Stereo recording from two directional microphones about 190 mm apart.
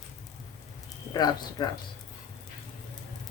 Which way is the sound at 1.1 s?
20° left (ahead or behind).